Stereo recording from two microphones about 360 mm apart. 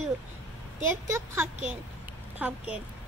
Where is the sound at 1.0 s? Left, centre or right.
Centre.